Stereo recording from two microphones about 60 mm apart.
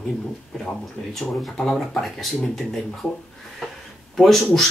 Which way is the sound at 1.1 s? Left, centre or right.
Centre.